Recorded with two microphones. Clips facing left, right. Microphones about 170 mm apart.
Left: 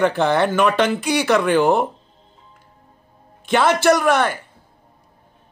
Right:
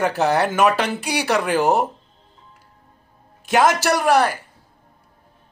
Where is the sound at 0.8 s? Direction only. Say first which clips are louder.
Left 5 dB; 35° right (ahead or behind).